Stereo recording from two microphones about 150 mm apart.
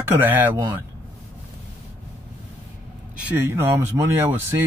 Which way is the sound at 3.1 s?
10° right (ahead or behind).